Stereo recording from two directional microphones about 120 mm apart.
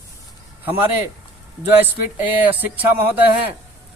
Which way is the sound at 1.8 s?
15° right (ahead or behind).